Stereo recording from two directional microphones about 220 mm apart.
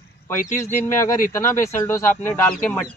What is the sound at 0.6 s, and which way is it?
Speech, 10° left (ahead or behind).